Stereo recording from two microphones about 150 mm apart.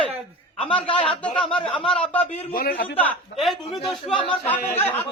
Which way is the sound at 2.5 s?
70° left (ahead or behind).